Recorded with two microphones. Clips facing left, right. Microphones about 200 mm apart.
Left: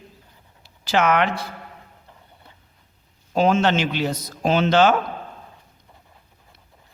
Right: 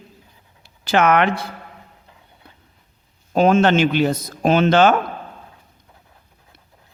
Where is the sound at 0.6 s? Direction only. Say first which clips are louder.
Right 3 dB; 55° right (ahead or behind).